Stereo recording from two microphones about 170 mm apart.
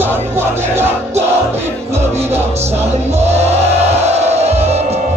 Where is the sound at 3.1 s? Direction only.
40° right (ahead or behind).